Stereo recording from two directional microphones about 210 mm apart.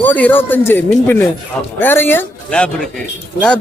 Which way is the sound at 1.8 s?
10° left (ahead or behind).